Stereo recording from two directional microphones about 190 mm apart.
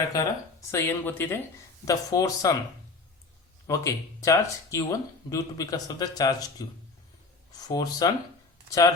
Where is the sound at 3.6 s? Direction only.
15° left (ahead or behind).